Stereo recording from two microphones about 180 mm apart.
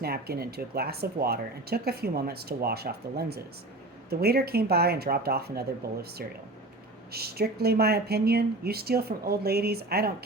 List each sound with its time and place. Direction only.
0.0 s speech: 60° right (ahead or behind)